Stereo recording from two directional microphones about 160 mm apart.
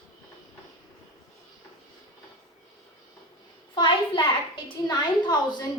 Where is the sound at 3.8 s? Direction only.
30° left (ahead or behind).